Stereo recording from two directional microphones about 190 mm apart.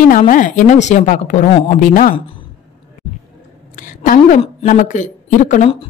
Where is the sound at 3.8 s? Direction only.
45° left (ahead or behind).